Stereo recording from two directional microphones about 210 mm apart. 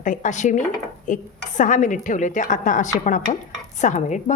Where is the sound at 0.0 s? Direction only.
35° left (ahead or behind).